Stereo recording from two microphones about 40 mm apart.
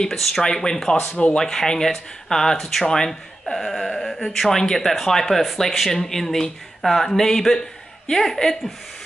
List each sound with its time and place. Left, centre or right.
0.1 s speech: centre
0.4 s speech: centre